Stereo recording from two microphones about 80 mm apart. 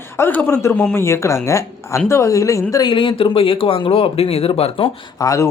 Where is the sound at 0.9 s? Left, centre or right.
Left.